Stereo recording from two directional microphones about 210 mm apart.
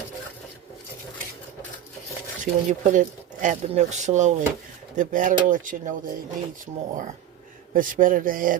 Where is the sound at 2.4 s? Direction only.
35° right (ahead or behind).